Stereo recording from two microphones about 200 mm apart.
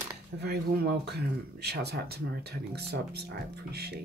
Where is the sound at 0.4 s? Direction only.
55° right (ahead or behind).